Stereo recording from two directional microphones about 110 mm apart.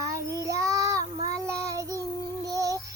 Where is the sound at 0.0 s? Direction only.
30° right (ahead or behind).